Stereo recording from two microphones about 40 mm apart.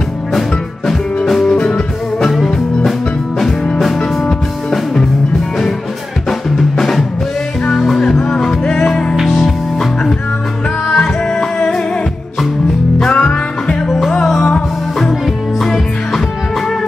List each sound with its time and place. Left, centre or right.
0.3 s music: centre
1.5 s music: left
2.2 s music: centre
6.5 s drum: centre
7.7 s music: centre
10.9 s music: left
13.1 s music: left
13.8 s music: centre